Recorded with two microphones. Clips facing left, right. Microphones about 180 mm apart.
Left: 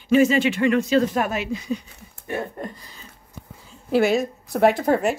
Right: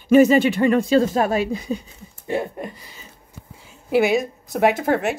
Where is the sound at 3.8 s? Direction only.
5° right (ahead or behind).